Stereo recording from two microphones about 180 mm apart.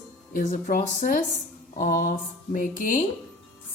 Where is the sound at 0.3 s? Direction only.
50° left (ahead or behind).